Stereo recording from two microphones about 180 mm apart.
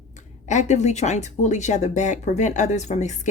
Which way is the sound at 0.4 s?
40° left (ahead or behind).